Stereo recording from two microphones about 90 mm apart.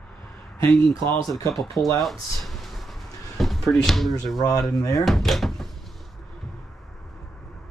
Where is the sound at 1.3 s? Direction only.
40° left (ahead or behind).